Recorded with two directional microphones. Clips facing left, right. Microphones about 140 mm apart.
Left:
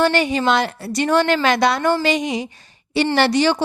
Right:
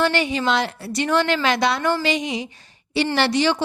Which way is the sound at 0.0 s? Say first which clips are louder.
Left 3 dB; 45° left (ahead or behind).